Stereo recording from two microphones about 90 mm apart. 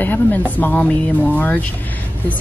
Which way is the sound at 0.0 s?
20° left (ahead or behind).